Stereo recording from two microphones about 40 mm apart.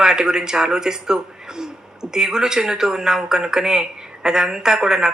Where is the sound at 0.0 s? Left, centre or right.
Centre.